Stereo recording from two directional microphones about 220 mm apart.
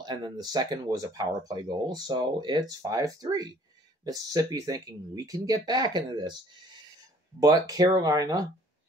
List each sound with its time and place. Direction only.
0.0 s speech: 20° right (ahead or behind)